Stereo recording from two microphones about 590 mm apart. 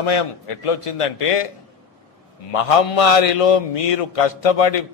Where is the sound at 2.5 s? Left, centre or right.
Left.